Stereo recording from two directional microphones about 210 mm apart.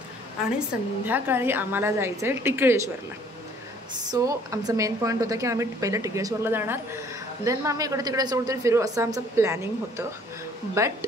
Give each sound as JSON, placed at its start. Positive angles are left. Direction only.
{"t": 0.6, "sound": "a woman's voice", "side_deg": -10}
{"t": 4.1, "sound": "a woman's voice", "side_deg": -15}